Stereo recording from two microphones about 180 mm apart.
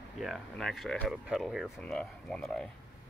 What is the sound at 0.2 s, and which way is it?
Speech, centre (ahead or behind).